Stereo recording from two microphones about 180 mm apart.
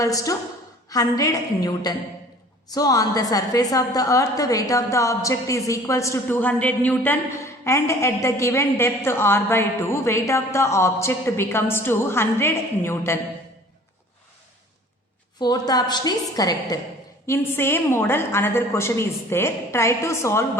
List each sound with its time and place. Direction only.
0.0 s a woman's voice: 20° left (ahead or behind)
15.4 s a woman's voice: 20° left (ahead or behind)